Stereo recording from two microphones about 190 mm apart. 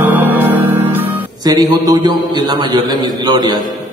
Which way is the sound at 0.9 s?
20° right (ahead or behind).